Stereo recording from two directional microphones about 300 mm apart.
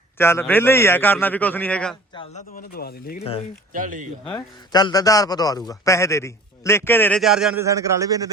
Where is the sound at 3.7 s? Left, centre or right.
Right.